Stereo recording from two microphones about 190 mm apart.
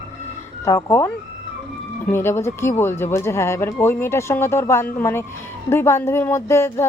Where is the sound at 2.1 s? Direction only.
10° left (ahead or behind).